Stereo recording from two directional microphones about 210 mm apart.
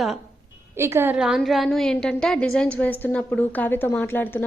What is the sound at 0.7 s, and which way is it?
A woman's voice, 10° right (ahead or behind).